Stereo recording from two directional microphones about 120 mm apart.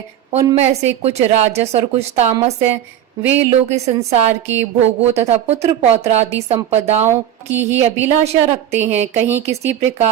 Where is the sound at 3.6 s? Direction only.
60° right (ahead or behind).